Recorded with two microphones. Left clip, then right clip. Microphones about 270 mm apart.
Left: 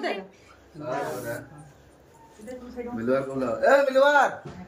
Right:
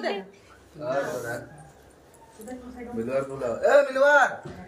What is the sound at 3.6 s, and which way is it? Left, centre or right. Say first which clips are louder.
Speech: even; centre.